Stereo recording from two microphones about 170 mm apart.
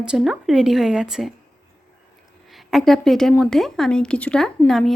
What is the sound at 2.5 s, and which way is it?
Speech, centre (ahead or behind).